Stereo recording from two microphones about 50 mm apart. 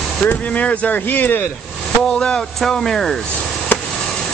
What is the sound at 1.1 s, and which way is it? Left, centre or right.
Speech, left.